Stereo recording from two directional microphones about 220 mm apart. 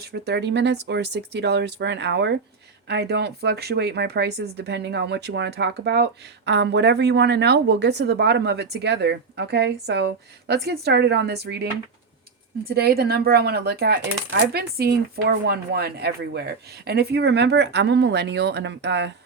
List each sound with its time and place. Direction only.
0.1 s speech: 50° right (ahead or behind)